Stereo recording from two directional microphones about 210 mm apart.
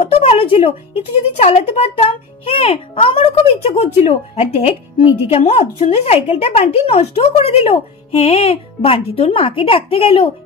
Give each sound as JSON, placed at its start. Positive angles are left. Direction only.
{"t": 0.0, "sound": "a woman's voice", "side_deg": 25}